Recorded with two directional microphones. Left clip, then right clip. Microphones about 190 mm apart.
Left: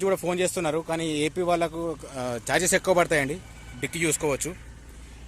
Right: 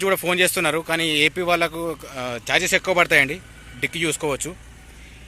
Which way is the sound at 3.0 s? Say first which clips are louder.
Right 7 dB; 10° left (ahead or behind).